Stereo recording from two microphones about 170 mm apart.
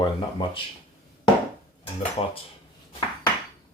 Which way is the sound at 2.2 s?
35° left (ahead or behind).